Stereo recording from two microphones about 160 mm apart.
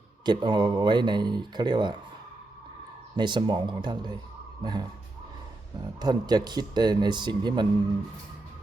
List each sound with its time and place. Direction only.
0.3 s speech: 30° right (ahead or behind)
3.2 s speech: 30° right (ahead or behind)
6.0 s speech: 25° right (ahead or behind)